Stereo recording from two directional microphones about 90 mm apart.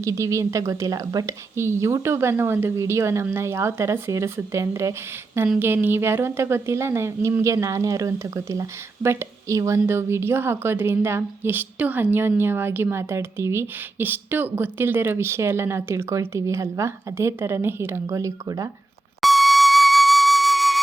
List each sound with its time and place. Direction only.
0.0 s a woman's voice: 35° right (ahead or behind)
19.2 s flute: centre (ahead or behind)